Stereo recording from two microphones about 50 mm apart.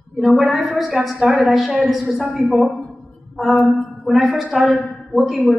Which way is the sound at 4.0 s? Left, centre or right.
Centre.